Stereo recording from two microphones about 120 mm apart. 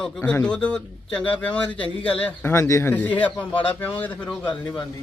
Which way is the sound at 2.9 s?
15° left (ahead or behind).